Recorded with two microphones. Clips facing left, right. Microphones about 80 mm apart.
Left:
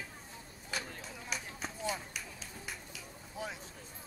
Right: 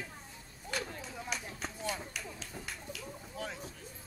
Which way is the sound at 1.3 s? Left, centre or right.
Centre.